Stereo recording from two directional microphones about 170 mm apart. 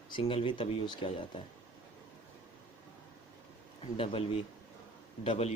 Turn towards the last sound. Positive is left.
turn(degrees=35)  # may be behind; listen again after turning